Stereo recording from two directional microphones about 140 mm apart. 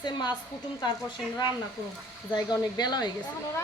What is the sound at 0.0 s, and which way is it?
Speech, 30° left (ahead or behind).